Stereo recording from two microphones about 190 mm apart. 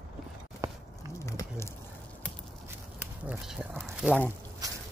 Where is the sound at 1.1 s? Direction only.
15° left (ahead or behind).